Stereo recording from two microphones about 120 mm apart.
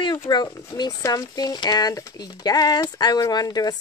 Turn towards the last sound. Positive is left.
turn(degrees=35)  # may be behind; listen again after turning